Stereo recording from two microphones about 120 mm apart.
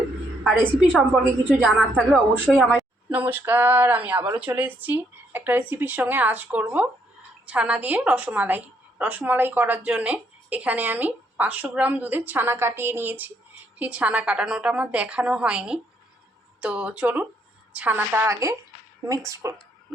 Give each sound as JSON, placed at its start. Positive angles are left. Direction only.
{"t": 0.5, "sound": "a woman's voice", "side_deg": -15}
{"t": 3.1, "sound": "a woman's voice", "side_deg": -15}